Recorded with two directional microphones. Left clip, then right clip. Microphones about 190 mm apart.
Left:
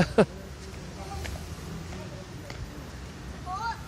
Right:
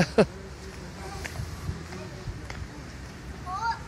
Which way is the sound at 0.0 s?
Centre (ahead or behind).